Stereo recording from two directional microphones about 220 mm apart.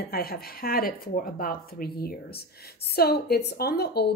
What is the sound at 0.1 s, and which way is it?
A woman's voice, 45° left (ahead or behind).